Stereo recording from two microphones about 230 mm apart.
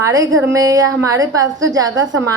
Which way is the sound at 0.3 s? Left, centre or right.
Right.